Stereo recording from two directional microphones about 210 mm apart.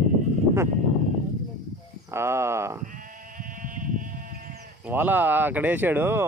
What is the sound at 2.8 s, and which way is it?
Sheep, 40° right (ahead or behind).